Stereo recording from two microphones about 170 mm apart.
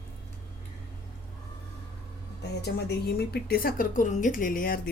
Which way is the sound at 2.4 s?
75° left (ahead or behind).